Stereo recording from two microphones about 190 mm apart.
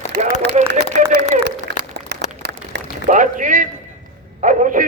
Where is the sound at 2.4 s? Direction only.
65° right (ahead or behind).